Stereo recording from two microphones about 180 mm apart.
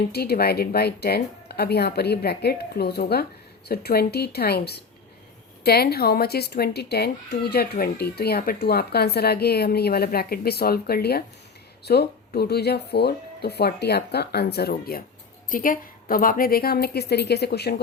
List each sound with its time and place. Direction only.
0.1 s speech: 60° left (ahead or behind)